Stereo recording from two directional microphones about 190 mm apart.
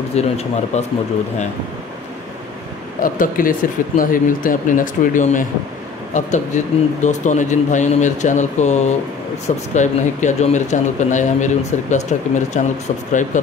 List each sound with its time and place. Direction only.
0.1 s a man's voice: 35° left (ahead or behind)
3.0 s a man's voice: 45° left (ahead or behind)